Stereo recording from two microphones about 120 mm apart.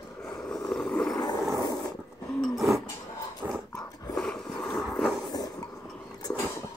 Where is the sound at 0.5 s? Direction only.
5° left (ahead or behind).